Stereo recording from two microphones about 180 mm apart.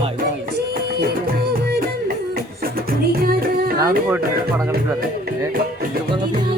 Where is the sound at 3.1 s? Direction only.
55° right (ahead or behind).